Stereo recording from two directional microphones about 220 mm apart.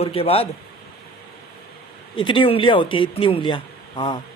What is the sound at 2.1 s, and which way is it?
A man's voice, 25° left (ahead or behind).